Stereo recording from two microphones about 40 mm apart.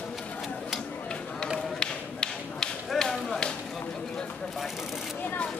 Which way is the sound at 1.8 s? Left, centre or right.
Left.